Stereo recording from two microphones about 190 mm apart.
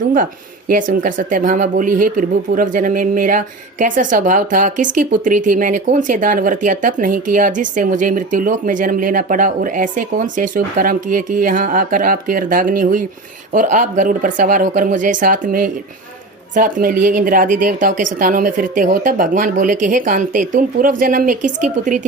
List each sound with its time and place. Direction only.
0.0 s speech: 45° right (ahead or behind)